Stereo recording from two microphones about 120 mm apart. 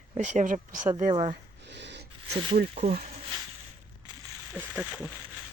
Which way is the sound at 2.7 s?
60° right (ahead or behind).